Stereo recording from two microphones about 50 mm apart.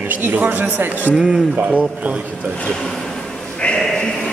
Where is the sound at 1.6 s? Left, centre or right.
Right.